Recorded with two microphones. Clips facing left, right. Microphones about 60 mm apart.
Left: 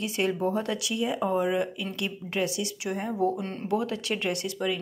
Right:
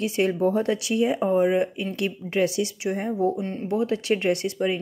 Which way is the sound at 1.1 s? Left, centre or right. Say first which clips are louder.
Right 3 dB; right.